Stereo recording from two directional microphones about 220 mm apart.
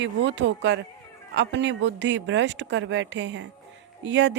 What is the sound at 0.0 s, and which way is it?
A woman's voice, 55° right (ahead or behind).